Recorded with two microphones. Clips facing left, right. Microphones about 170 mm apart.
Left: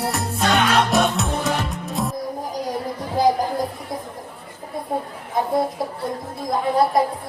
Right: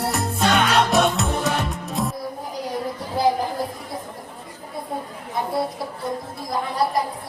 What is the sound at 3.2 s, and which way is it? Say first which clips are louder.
Chatter: left 2 dB; 45° left (ahead or behind).